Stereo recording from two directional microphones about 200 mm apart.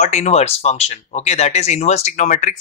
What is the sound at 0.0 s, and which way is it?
Speech, 35° left (ahead or behind).